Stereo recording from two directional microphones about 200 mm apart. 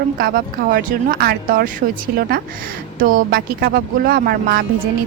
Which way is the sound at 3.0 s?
45° right (ahead or behind).